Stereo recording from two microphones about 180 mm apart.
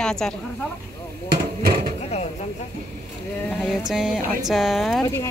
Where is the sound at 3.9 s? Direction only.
Centre (ahead or behind).